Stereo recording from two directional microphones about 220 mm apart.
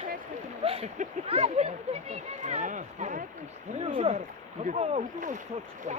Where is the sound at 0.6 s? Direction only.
25° right (ahead or behind).